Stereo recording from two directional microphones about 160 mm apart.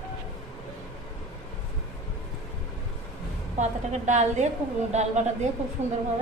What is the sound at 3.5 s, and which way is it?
A woman's voice, 50° right (ahead or behind).